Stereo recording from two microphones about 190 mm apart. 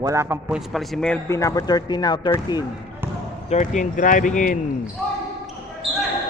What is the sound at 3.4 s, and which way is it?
Speech, 40° left (ahead or behind).